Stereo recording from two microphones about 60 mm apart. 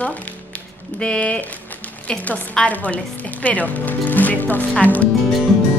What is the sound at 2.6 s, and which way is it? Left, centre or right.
Speech, left.